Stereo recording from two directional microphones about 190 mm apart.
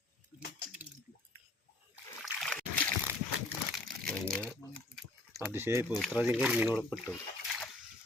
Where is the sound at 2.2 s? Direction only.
5° left (ahead or behind).